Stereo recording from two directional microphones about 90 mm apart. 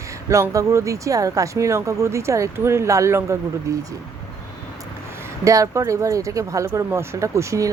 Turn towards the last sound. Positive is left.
turn(degrees=-35)  # may be behind; listen again after turning